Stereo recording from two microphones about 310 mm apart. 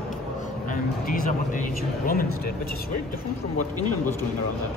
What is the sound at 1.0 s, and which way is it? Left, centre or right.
Speech, left.